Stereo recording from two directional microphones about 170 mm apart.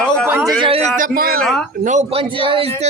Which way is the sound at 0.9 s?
55° right (ahead or behind).